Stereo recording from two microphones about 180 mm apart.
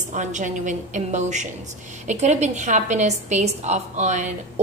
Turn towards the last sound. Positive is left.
turn(degrees=-40)  # may be behind; listen again after turning